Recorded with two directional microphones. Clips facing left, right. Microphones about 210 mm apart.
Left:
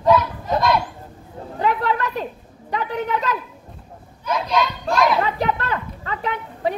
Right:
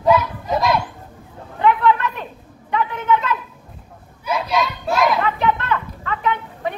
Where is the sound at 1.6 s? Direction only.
35° left (ahead or behind).